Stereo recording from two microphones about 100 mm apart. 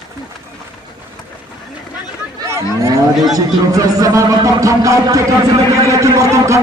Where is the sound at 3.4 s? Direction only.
35° right (ahead or behind).